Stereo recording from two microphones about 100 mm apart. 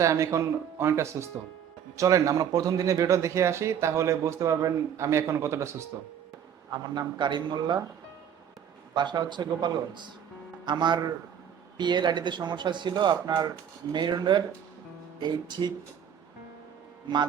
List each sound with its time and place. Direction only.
0.0 s speech: 30° right (ahead or behind)
6.7 s speech: 45° right (ahead or behind)
9.0 s speech: 50° right (ahead or behind)